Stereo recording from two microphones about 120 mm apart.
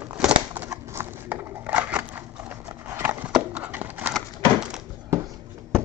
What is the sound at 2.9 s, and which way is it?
Horse, 15° right (ahead or behind).